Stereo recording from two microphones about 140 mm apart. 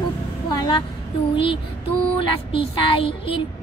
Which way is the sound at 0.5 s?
35° left (ahead or behind).